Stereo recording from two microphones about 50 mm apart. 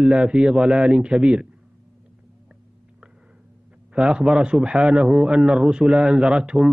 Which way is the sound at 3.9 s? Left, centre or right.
Centre.